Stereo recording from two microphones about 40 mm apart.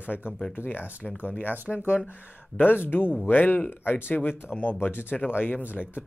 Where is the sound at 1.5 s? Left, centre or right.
Right.